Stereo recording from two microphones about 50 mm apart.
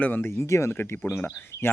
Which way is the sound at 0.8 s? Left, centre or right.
Left.